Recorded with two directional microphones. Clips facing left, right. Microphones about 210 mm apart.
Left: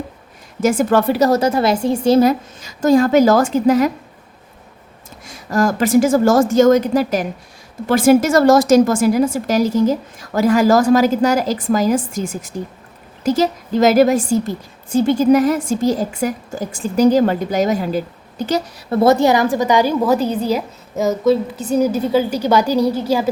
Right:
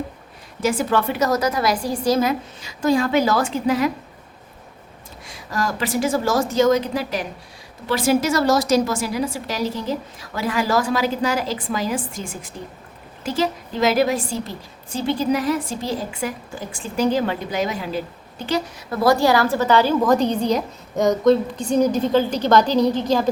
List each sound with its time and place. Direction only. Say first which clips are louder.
0.6 s a woman's voice: left 6 dB; 45° left (ahead or behind); by 2.3 s 30° left (ahead or behind)
2.6 s a woman's voice: left 6 dB; 45° left (ahead or behind)
5.2 s a woman's voice: left 8 dB; 45° left (ahead or behind)
18.9 s a woman's voice: left 4 dB; 25° left (ahead or behind); by 23.3 s 10° left (ahead or behind)